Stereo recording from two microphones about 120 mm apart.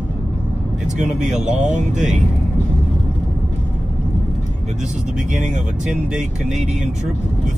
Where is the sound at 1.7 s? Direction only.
90° right.